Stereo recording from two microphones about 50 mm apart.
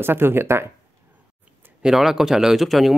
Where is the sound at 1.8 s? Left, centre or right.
Centre.